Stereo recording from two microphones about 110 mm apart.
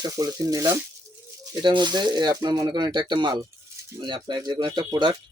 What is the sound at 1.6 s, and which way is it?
Speech, 45° right (ahead or behind).